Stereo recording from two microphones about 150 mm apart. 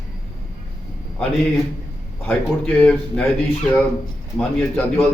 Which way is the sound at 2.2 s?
10° left (ahead or behind).